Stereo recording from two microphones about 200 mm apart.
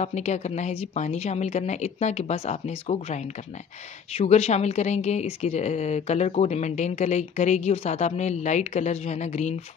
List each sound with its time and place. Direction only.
0.0 s a woman's voice: 35° left (ahead or behind)